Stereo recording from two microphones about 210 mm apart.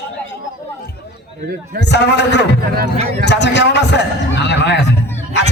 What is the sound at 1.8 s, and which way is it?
A man's voice, 55° left (ahead or behind).